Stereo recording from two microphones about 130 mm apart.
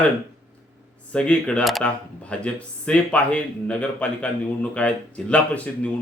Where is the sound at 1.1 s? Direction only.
10° left (ahead or behind).